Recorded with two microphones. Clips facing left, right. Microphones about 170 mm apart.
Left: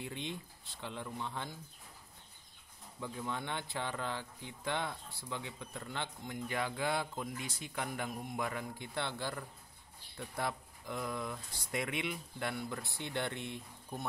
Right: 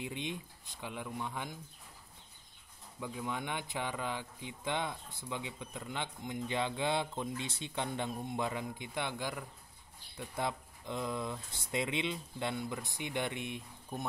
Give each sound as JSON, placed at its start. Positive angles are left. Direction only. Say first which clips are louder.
{"t": 0.0, "sound": "speech", "louder": "right 2 dB", "side_deg": -15}
{"t": 3.0, "sound": "speech", "louder": "right 1 dB", "side_deg": -15}